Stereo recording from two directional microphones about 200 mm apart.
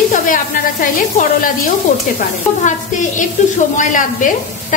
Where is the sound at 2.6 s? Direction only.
35° left (ahead or behind).